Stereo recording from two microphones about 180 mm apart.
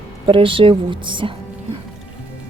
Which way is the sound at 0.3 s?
30° right (ahead or behind).